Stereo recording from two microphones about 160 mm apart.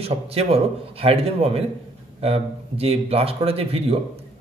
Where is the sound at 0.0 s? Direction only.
40° right (ahead or behind).